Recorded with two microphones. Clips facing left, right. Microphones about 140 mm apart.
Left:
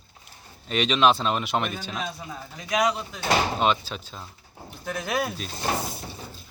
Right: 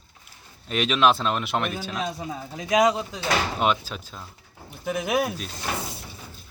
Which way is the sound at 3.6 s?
5° right (ahead or behind).